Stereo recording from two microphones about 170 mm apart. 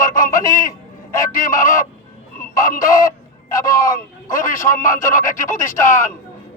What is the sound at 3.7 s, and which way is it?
Speech, 20° left (ahead or behind).